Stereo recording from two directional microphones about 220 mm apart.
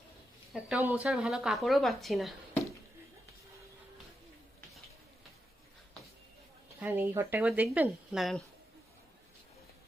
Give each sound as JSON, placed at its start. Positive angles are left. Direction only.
{"t": 0.5, "sound": "speech", "side_deg": -5}
{"t": 6.7, "sound": "speech", "side_deg": -10}